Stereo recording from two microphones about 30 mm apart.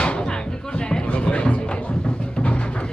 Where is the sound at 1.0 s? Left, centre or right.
Left.